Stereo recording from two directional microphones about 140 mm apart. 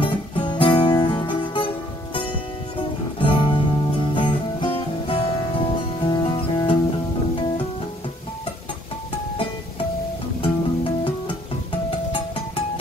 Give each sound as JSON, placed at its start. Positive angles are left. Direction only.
{"t": 0.0, "sound": "music", "side_deg": 35}
{"t": 3.2, "sound": "music", "side_deg": 35}
{"t": 10.4, "sound": "music", "side_deg": 40}